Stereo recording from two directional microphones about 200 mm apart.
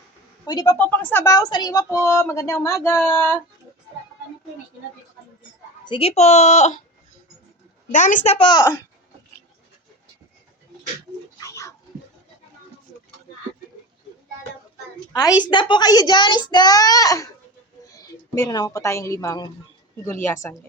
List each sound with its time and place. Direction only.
0.4 s a woman's voice: 15° left (ahead or behind)
5.8 s speech: 25° left (ahead or behind)
7.9 s a woman's voice: 40° left (ahead or behind); by 8.8 s 15° left (ahead or behind)
11.3 s pigeon: 15° left (ahead or behind)
15.1 s a woman's voice: 20° left (ahead or behind)